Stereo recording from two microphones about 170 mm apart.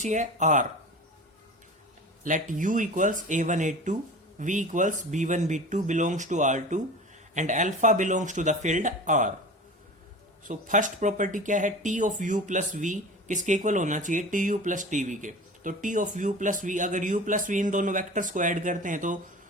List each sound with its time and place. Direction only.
0.0 s speech: 45° right (ahead or behind)
2.2 s speech: 50° right (ahead or behind)
10.4 s speech: 50° right (ahead or behind)